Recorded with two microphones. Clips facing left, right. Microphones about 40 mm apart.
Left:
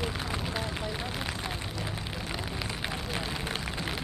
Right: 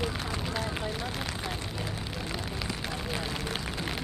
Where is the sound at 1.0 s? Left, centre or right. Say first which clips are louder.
Even; centre.